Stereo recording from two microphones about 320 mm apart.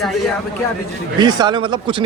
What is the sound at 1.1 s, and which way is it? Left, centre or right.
Speech, centre.